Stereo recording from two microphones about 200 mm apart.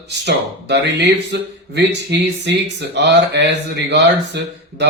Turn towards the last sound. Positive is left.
turn(degrees=-60)  # may be behind; listen again after turning